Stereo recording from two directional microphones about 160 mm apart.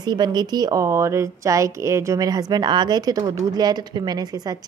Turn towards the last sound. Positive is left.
turn(degrees=-25)  # may be behind; listen again after turning